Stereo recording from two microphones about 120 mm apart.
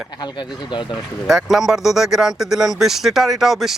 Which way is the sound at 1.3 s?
5° right (ahead or behind).